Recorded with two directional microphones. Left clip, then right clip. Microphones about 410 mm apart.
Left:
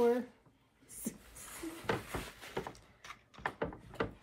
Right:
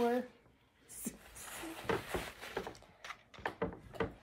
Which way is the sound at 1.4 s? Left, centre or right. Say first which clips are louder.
Left 1 dB; right.